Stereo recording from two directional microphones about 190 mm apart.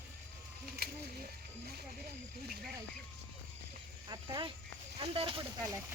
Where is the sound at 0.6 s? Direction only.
55° right (ahead or behind).